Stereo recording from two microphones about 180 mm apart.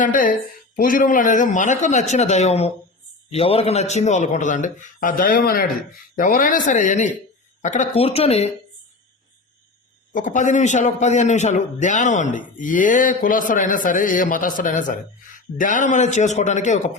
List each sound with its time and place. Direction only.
0.0 s a man's voice: 50° left (ahead or behind)
10.2 s a man's voice: 45° left (ahead or behind)